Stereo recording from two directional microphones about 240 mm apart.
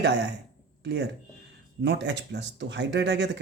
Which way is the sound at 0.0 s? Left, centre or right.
Right.